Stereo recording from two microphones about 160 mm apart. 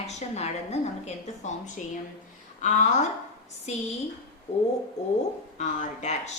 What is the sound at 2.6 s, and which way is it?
Speech, 50° left (ahead or behind).